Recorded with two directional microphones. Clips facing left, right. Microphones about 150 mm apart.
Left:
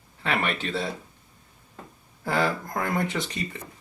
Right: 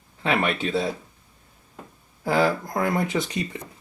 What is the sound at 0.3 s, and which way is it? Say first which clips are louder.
Speech: right 4 dB; 5° right (ahead or behind).